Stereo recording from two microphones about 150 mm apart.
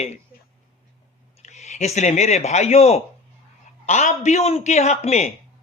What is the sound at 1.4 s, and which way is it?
A man's voice, 50° left (ahead or behind).